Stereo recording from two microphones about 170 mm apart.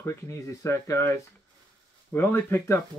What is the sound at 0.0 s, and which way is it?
Speech, 15° left (ahead or behind).